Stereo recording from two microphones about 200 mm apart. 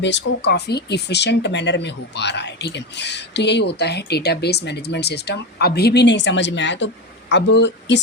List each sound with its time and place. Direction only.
0.0 s speech: 60° left (ahead or behind)